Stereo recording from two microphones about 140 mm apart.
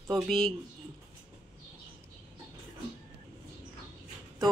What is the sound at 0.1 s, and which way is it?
Speech, 5° left (ahead or behind).